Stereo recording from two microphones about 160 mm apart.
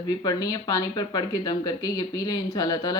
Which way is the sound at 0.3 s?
25° left (ahead or behind).